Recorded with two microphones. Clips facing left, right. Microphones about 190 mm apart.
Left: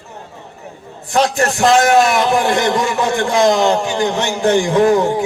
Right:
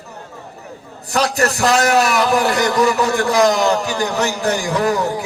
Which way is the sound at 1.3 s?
35° right (ahead or behind).